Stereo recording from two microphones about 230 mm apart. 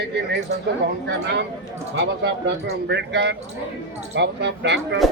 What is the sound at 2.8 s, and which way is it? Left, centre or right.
Speech, right.